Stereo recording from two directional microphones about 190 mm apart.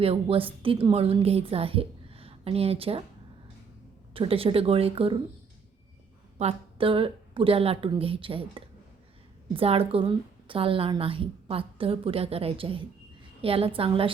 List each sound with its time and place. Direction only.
0.0 s a woman's voice: 30° right (ahead or behind)
4.1 s a woman's voice: 30° right (ahead or behind)
6.4 s a woman's voice: 30° right (ahead or behind)